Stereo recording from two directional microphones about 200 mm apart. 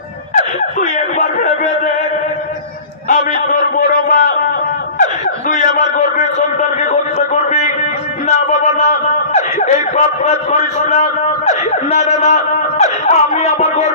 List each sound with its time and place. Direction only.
0.3 s wail: 40° left (ahead or behind)
3.1 s a man's voice: 40° left (ahead or behind)
5.5 s a man's voice: 40° left (ahead or behind)
8.3 s a man's voice: 35° left (ahead or behind)